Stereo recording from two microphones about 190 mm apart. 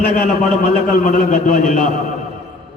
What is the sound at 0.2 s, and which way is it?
A man's voice, 45° left (ahead or behind).